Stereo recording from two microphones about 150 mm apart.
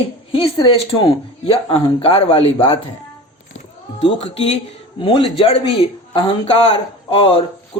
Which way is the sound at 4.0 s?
45° left (ahead or behind).